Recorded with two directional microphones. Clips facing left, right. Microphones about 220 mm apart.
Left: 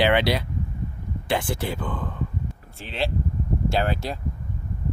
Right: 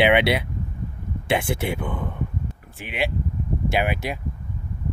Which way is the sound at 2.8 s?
15° right (ahead or behind).